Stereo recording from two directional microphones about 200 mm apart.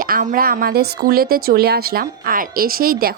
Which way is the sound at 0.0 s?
45° right (ahead or behind).